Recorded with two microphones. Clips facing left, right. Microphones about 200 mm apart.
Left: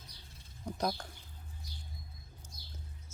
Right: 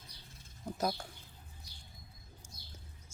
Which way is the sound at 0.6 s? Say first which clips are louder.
Even; 5° right (ahead or behind).